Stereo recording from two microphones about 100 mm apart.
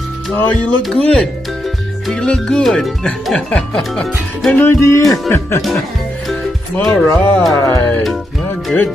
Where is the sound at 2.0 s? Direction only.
5° left (ahead or behind).